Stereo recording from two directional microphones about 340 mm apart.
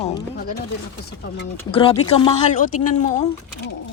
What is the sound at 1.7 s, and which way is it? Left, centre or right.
A woman's voice, centre.